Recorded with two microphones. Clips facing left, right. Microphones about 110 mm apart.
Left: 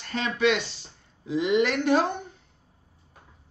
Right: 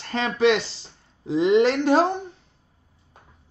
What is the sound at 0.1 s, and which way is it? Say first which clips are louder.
A woman's voice: right 4 dB; 35° right (ahead or behind).